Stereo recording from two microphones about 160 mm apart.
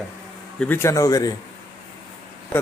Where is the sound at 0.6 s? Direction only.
15° left (ahead or behind).